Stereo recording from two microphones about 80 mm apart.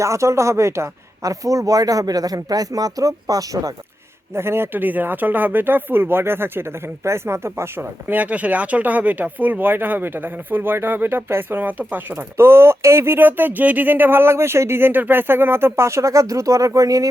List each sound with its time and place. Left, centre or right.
0.0 s speech: right
4.4 s speech: right